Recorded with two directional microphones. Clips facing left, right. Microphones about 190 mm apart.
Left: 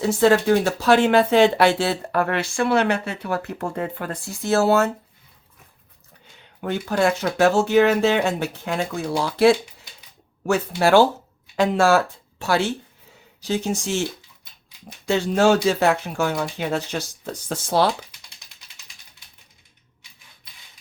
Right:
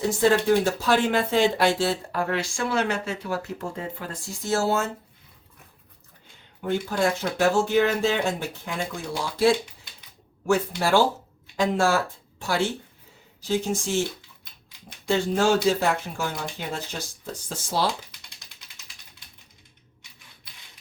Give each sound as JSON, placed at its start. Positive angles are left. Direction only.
{"t": 0.1, "sound": "speech", "side_deg": 70}
{"t": 6.6, "sound": "speech", "side_deg": 70}
{"t": 15.0, "sound": "speech", "side_deg": 70}